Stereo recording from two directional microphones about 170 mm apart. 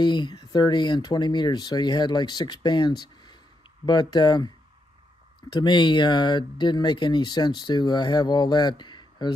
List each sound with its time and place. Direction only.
0.0 s speech: 25° left (ahead or behind)
5.5 s speech: 25° left (ahead or behind)